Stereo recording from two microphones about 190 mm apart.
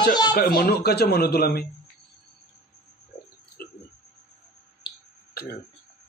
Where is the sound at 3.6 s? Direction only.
50° left (ahead or behind).